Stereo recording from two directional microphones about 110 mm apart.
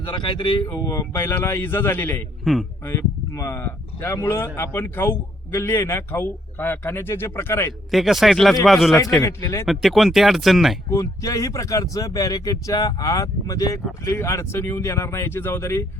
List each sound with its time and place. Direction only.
0.0 s speech: 45° left (ahead or behind)
0.9 s speech: 25° left (ahead or behind)
2.4 s speech: centre (ahead or behind)
2.8 s speech: 25° left (ahead or behind)
7.9 s speech: centre (ahead or behind)
9.2 s speech: 30° left (ahead or behind)
9.6 s speech: centre (ahead or behind)
10.8 s speech: 25° left (ahead or behind)